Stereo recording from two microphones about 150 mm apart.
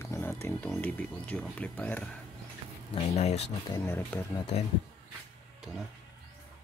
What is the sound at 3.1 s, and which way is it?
Speech, 45° left (ahead or behind).